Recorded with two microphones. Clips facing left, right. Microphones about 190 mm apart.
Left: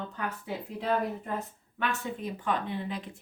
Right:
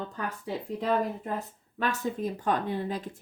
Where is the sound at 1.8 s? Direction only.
40° right (ahead or behind).